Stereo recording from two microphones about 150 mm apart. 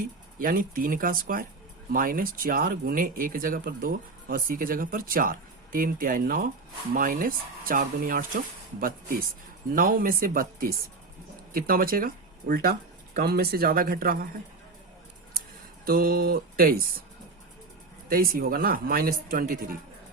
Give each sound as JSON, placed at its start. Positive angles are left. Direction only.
{"t": 0.0, "sound": "speech", "side_deg": -70}
{"t": 15.9, "sound": "speech", "side_deg": -80}
{"t": 18.1, "sound": "speech", "side_deg": -75}